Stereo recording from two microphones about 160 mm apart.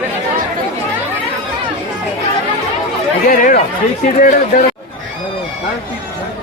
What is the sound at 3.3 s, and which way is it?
Speech, 60° left (ahead or behind).